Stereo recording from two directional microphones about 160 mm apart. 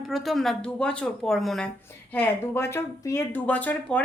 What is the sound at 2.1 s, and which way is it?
Speech, 15° left (ahead or behind).